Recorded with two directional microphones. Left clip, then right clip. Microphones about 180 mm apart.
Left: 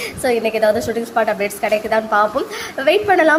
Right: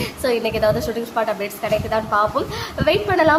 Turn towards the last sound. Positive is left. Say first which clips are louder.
# left 3 dB
turn(degrees=10)  # may be behind; listen again after turning